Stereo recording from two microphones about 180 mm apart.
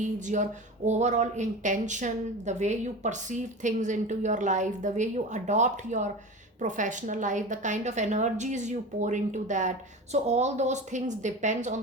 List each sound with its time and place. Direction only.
0.0 s speech: 45° right (ahead or behind)